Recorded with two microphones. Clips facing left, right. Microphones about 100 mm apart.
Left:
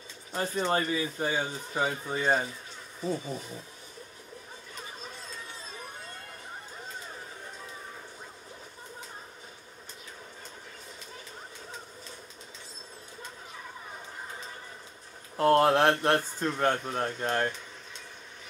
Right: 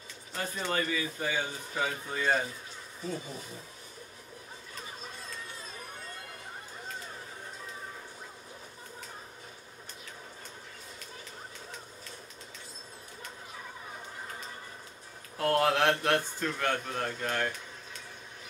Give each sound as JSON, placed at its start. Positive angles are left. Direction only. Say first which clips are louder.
{"t": 0.3, "sound": "speech", "louder": "left 6 dB", "side_deg": 25}
{"t": 15.3, "sound": "speech", "louder": "left 5 dB", "side_deg": 35}